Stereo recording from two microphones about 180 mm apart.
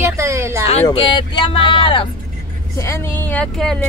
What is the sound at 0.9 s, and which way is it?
Speech, 30° left (ahead or behind).